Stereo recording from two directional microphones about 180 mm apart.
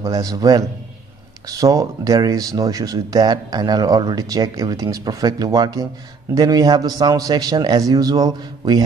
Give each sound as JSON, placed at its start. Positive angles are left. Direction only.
{"t": 0.0, "sound": "speech", "side_deg": -20}